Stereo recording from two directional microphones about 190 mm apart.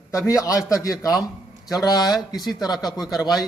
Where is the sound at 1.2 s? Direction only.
Centre (ahead or behind).